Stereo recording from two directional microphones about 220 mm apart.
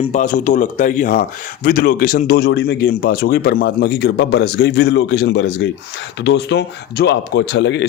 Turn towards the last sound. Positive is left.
turn(degrees=55)  # may be behind; listen again after turning